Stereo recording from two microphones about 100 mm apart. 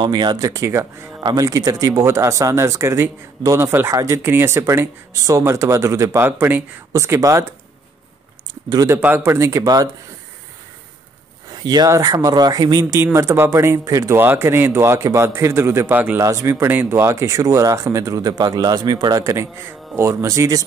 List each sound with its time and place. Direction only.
0.0 s speech: 50° right (ahead or behind)
4.3 s speech: 25° right (ahead or behind)
8.8 s speech: 20° right (ahead or behind); by 9.8 s 40° right (ahead or behind)
11.5 s speech: 45° right (ahead or behind)
13.0 s speech: 25° right (ahead or behind)